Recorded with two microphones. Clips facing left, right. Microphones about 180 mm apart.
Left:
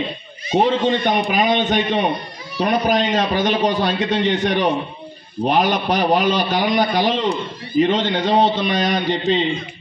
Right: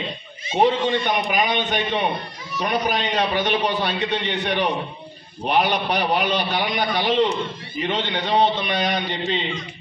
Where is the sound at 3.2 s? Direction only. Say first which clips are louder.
Left 3 dB; 35° left (ahead or behind).